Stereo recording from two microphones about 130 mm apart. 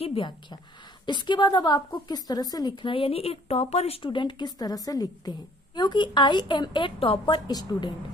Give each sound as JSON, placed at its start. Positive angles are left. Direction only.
{"t": 0.0, "sound": "a woman's voice", "side_deg": 45}